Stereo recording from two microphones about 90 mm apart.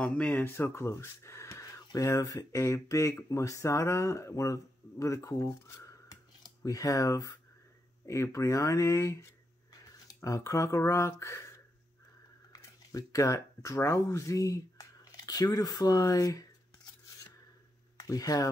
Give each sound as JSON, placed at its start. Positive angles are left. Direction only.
{"t": 0.0, "sound": "speech", "side_deg": 15}
{"t": 9.7, "sound": "a sound", "side_deg": 40}
{"t": 10.8, "sound": "speech", "side_deg": 30}
{"t": 17.9, "sound": "speech", "side_deg": 40}